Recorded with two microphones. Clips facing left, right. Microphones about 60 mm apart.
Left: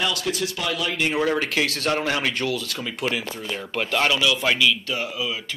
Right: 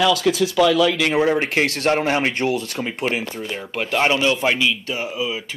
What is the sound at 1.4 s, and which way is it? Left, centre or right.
Speech, right.